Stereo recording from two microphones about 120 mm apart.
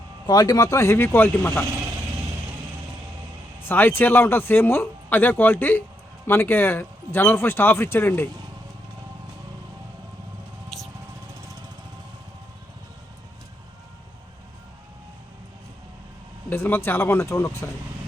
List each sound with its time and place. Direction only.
0.3 s speech: 35° left (ahead or behind); by 1.6 s 15° left (ahead or behind)
3.6 s speech: 15° left (ahead or behind)
10.7 s music: centre (ahead or behind)
16.5 s speech: 15° left (ahead or behind)